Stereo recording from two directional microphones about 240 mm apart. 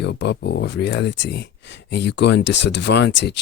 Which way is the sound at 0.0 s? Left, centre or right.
Left.